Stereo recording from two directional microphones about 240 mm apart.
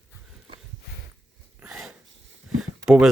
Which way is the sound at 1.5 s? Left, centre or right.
Centre.